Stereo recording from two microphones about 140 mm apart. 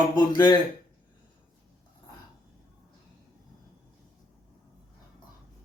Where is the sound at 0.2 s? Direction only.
30° left (ahead or behind).